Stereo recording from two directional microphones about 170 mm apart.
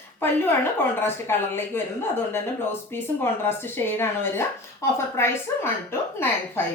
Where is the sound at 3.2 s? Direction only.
15° left (ahead or behind).